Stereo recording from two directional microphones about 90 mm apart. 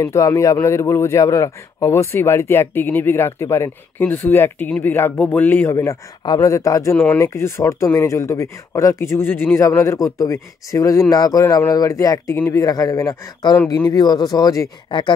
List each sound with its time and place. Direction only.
0.0 s a man's voice: 35° left (ahead or behind)
4.0 s speech: 20° left (ahead or behind)
6.2 s speech: 55° left (ahead or behind)
6.5 s a man's voice: 35° left (ahead or behind)
13.8 s speech: 50° left (ahead or behind)
14.9 s speech: 60° left (ahead or behind)